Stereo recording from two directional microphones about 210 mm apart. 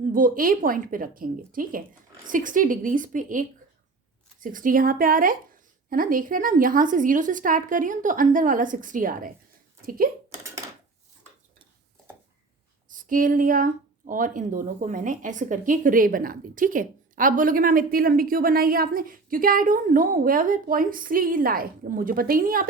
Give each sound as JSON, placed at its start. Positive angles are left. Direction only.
{"t": 0.1, "sound": "a woman's voice", "side_deg": -40}
{"t": 12.9, "sound": "a sound", "side_deg": -40}
{"t": 14.1, "sound": "a woman's voice", "side_deg": -40}